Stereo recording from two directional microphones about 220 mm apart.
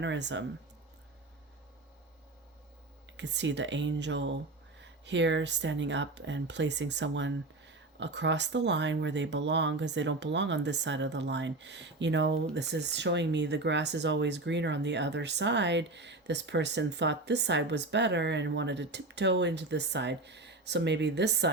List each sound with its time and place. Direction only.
0.0 s speech: 55° right (ahead or behind)
3.2 s speech: 55° right (ahead or behind)